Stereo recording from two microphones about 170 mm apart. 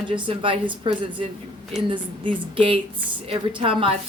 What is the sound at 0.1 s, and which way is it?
Speech, 30° right (ahead or behind).